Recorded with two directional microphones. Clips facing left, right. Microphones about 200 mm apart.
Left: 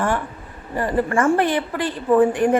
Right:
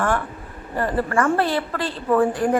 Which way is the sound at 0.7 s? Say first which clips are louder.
Left 2 dB; 15° left (ahead or behind).